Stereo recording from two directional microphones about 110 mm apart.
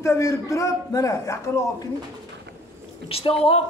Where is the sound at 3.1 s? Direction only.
60° left (ahead or behind).